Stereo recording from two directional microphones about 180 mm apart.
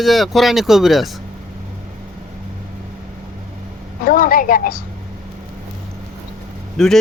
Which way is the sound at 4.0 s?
55° left (ahead or behind).